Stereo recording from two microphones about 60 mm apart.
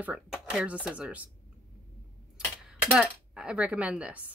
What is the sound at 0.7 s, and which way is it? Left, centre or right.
Speech, right.